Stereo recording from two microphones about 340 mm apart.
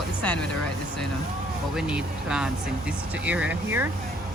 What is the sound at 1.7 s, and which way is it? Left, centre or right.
Speech, centre.